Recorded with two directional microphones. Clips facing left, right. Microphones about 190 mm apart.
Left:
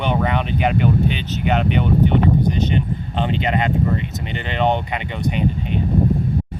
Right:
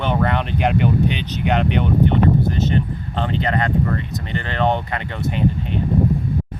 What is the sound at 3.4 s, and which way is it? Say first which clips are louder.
Speech: even; 20° left (ahead or behind).